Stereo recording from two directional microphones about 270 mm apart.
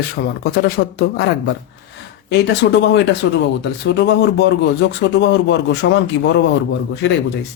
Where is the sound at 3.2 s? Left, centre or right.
Left.